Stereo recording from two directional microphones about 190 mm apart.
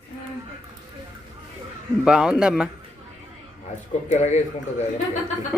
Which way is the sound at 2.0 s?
5° right (ahead or behind).